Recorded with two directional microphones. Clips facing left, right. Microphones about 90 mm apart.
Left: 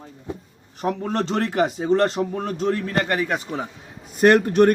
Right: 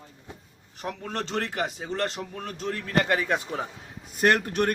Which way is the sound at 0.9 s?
15° left (ahead or behind).